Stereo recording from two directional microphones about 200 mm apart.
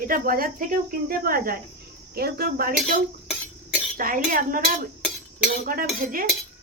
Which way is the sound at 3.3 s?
5° right (ahead or behind).